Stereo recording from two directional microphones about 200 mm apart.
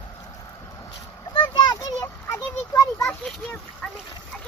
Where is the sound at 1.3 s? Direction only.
25° left (ahead or behind).